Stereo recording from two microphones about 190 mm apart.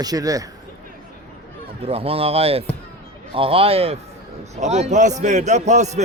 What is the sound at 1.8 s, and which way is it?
A man's voice, 30° right (ahead or behind).